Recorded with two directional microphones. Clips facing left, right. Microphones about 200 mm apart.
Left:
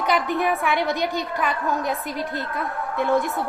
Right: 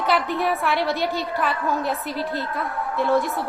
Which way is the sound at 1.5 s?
20° left (ahead or behind).